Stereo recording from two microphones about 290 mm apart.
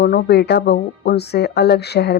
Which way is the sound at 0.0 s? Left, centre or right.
Left.